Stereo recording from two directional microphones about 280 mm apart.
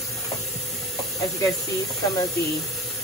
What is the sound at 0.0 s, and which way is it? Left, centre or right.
Steam, centre.